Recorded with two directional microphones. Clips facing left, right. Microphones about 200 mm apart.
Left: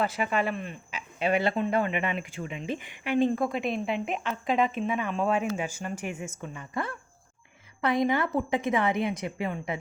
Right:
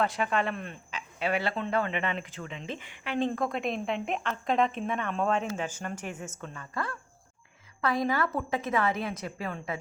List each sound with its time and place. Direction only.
0.0 s speech: 5° left (ahead or behind)
1.2 s a woman's voice: 20° left (ahead or behind)